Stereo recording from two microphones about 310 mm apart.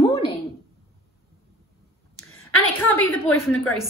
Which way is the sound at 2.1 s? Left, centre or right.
Left.